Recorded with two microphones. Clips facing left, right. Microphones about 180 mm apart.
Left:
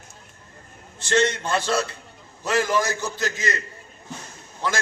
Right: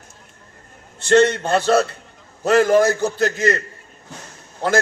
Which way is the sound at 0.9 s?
60° right (ahead or behind).